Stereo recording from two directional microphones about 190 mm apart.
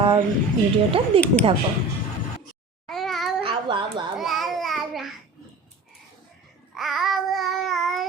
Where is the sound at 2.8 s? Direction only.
Centre (ahead or behind).